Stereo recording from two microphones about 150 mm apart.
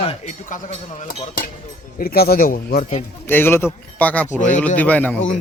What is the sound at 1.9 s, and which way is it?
Speech, 85° left.